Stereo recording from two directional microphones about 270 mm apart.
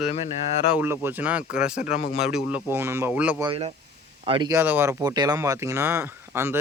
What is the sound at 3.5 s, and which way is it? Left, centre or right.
Speech, right.